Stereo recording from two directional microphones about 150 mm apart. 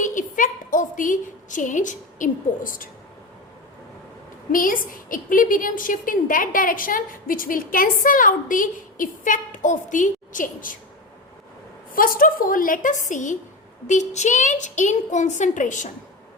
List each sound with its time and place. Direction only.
0.0 s a sound: 60° left (ahead or behind)
4.5 s a woman's voice: 65° left (ahead or behind)
11.9 s a woman's voice: 70° left (ahead or behind)